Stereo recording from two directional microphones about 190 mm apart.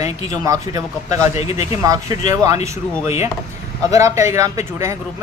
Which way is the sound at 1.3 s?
35° left (ahead or behind).